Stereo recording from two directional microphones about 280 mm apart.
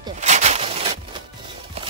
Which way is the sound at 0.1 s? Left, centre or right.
Right.